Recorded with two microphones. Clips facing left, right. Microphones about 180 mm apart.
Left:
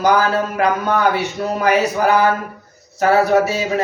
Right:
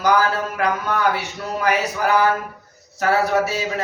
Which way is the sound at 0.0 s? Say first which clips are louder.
Left 3 dB; 25° left (ahead or behind).